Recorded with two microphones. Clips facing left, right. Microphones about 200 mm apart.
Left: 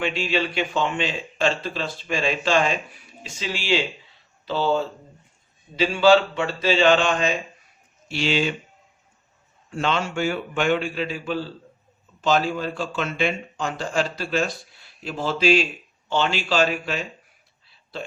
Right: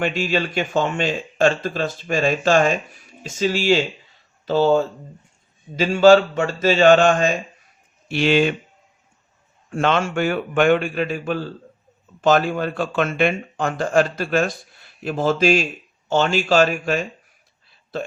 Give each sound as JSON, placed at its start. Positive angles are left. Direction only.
{"t": 0.0, "sound": "speech", "side_deg": -45}
{"t": 9.6, "sound": "speech", "side_deg": -55}